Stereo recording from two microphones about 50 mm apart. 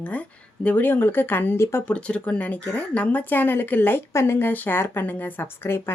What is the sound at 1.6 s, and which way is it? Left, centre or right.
Speech, left.